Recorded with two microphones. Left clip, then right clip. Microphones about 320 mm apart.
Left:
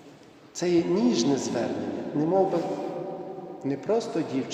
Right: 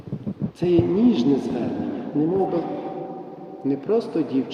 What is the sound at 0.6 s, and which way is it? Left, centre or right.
Speech, centre.